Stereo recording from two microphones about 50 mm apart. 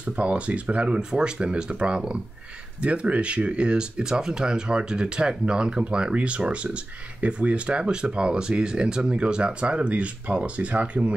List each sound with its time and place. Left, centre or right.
0.0 s speech: right